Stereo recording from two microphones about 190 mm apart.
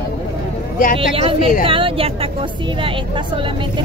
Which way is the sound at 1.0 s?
30° right (ahead or behind).